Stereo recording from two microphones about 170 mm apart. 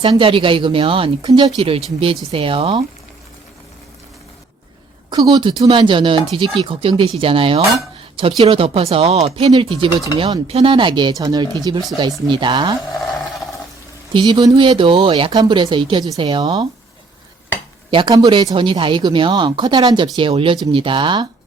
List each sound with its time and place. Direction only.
0.0 s speech: 30° right (ahead or behind)
5.1 s speech: 25° right (ahead or behind)
14.1 s speech: 30° right (ahead or behind)
17.9 s speech: 25° right (ahead or behind)